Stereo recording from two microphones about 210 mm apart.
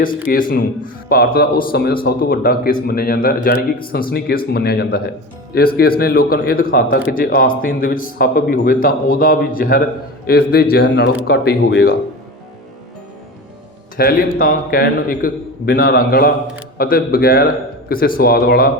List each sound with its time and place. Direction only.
0.3 s a man's voice: 40° left (ahead or behind)
13.9 s a man's voice: 45° left (ahead or behind)